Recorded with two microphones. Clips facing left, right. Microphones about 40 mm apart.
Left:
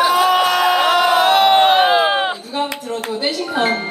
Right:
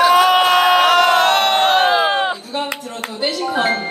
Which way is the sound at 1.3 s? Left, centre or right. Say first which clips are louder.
Left 2 dB; centre.